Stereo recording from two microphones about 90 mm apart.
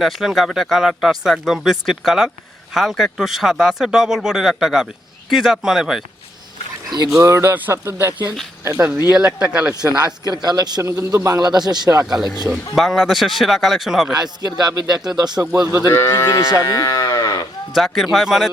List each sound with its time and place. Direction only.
0.0 s speech: centre (ahead or behind)
7.1 s speech: 30° right (ahead or behind); by 9.9 s 10° right (ahead or behind)
10.2 s speech: 50° right (ahead or behind)
10.8 s a man's voice: 35° right (ahead or behind)
11.3 s speech: 50° right (ahead or behind)
12.0 s speech: 5° right (ahead or behind)
14.1 s speech: 50° right (ahead or behind)
15.9 s livestock: 30° left (ahead or behind)
16.6 s moo: 40° left (ahead or behind)
17.7 s speech: centre (ahead or behind)